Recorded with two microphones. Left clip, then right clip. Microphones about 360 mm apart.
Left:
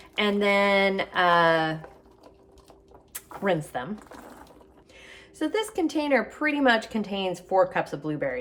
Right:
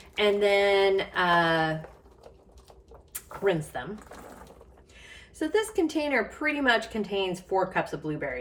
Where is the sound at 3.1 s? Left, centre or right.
Left.